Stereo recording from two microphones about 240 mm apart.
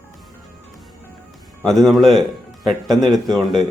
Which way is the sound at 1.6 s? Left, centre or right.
Centre.